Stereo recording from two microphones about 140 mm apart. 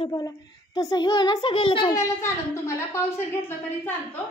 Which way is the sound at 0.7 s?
25° left (ahead or behind).